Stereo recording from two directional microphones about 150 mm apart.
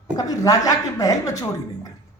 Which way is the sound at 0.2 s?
25° left (ahead or behind).